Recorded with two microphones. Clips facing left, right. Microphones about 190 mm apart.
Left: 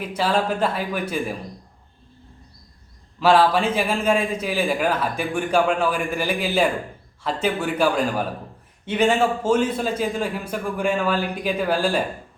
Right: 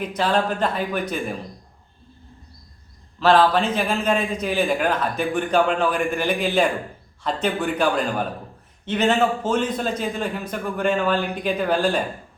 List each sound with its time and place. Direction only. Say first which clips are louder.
0.0 s a man's voice: right 1 dB; 5° left (ahead or behind)
3.2 s a man's voice: even; 10° left (ahead or behind)